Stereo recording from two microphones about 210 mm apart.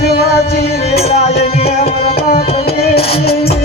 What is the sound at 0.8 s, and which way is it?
Music, 30° left (ahead or behind).